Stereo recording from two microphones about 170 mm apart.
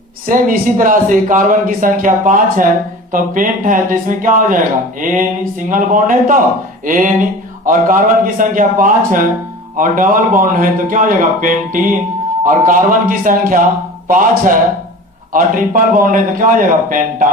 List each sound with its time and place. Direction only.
0.3 s a man's voice: 55° right (ahead or behind)